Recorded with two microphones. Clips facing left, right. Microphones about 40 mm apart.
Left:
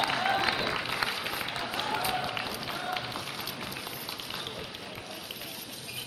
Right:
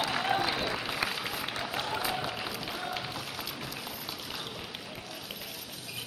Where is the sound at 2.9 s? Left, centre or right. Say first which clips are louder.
Left 2 dB; centre.